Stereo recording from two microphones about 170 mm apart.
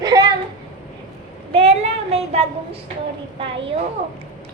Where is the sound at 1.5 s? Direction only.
35° right (ahead or behind).